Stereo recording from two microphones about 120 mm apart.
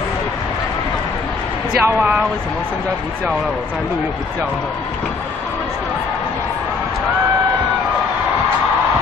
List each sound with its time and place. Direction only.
1.8 s speech: 15° right (ahead or behind)